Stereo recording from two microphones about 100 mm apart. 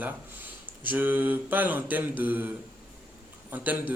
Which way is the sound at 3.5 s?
15° right (ahead or behind).